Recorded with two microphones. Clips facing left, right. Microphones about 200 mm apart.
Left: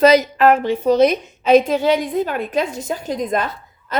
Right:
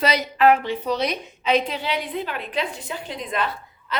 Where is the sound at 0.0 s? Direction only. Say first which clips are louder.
Left 7 dB; 45° left (ahead or behind).